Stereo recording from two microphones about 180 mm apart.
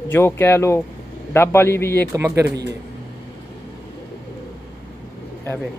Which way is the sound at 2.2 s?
15° right (ahead or behind).